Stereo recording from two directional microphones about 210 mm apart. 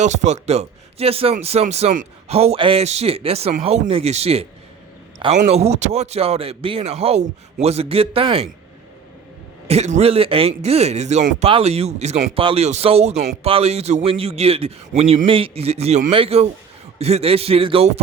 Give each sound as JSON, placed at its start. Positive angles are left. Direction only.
{"t": 0.0, "sound": "speech", "side_deg": -35}
{"t": 9.6, "sound": "speech", "side_deg": -30}